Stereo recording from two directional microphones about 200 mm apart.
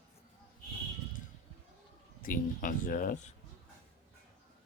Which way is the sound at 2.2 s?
40° left (ahead or behind).